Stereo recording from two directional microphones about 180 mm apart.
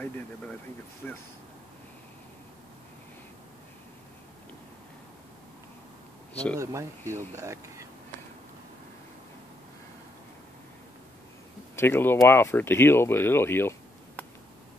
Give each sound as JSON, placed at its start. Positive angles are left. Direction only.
{"t": 1.0, "sound": "speech", "side_deg": 5}
{"t": 6.3, "sound": "speech", "side_deg": 5}
{"t": 6.6, "sound": "speech", "side_deg": -15}
{"t": 11.7, "sound": "speech", "side_deg": 15}